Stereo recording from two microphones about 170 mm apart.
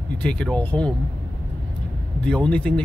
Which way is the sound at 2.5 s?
5° left (ahead or behind).